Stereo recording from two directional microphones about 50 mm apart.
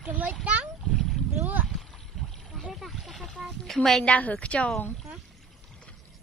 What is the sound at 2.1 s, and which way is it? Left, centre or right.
Boat, centre.